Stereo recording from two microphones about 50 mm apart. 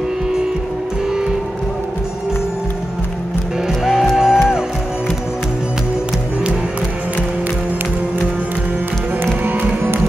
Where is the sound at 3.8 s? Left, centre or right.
Centre.